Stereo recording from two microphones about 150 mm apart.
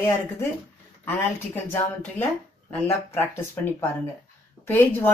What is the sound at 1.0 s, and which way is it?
Speech, 15° left (ahead or behind).